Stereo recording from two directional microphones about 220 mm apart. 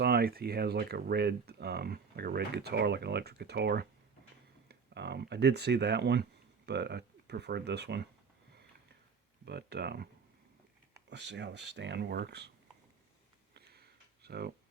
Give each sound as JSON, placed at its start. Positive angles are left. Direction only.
{"t": 0.0, "sound": "speech", "side_deg": -45}
{"t": 9.5, "sound": "speech", "side_deg": -50}
{"t": 11.1, "sound": "speech", "side_deg": -50}
{"t": 13.5, "sound": "a sound", "side_deg": -50}
{"t": 14.3, "sound": "speech", "side_deg": -45}